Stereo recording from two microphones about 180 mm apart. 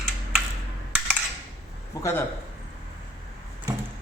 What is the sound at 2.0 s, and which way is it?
Speech, 15° left (ahead or behind).